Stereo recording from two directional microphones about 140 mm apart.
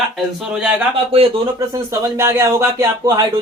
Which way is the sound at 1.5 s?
20° right (ahead or behind).